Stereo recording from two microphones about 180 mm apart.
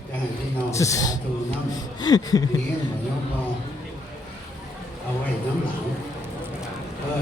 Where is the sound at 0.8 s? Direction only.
20° left (ahead or behind).